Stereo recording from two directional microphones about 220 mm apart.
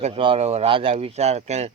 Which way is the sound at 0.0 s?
25° right (ahead or behind).